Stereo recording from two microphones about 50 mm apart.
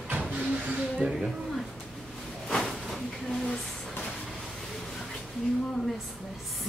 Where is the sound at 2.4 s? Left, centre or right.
Centre.